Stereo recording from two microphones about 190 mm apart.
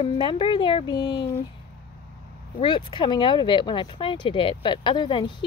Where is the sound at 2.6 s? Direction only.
25° left (ahead or behind).